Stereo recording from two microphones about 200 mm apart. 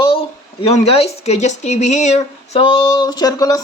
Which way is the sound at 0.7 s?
30° left (ahead or behind).